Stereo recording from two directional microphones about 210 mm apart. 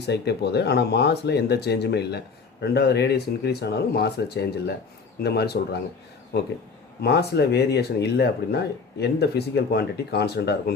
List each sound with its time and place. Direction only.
0.0 s speech: 50° left (ahead or behind)
7.0 s speech: 50° left (ahead or behind)